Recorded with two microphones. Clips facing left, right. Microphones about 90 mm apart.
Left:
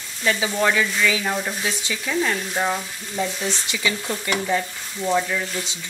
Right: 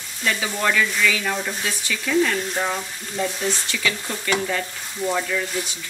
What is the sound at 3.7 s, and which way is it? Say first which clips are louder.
Speech: left 1 dB; 20° left (ahead or behind).